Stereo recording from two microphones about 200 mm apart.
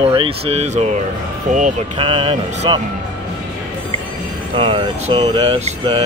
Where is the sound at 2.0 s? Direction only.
25° right (ahead or behind).